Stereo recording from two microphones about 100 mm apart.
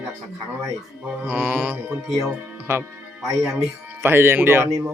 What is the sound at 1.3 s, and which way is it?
Speech, 20° right (ahead or behind).